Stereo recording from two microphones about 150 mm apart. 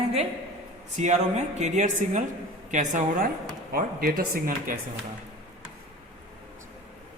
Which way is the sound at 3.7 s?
75° right (ahead or behind).